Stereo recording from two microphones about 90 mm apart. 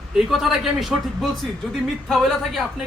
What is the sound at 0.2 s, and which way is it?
A man's voice, centre (ahead or behind).